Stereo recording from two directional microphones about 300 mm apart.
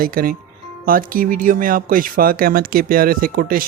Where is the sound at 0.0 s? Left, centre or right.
Right.